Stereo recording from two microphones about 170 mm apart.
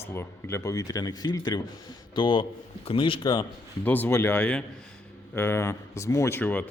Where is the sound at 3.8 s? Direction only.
10° left (ahead or behind).